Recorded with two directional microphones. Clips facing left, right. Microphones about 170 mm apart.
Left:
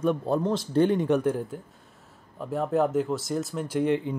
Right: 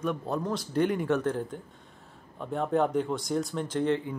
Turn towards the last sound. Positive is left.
turn(degrees=15)  # may be behind; listen again after turning